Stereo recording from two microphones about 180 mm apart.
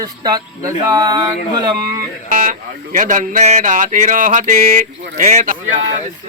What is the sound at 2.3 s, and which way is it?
Speech, 45° right (ahead or behind).